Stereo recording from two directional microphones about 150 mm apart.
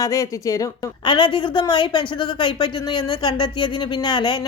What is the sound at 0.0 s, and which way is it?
A woman's voice, 20° left (ahead or behind).